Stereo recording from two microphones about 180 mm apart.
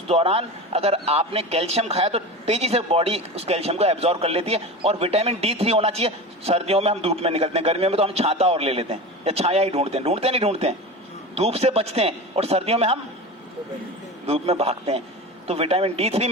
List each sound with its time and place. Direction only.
0.1 s a man's voice: 35° right (ahead or behind)
14.3 s a man's voice: 35° right (ahead or behind)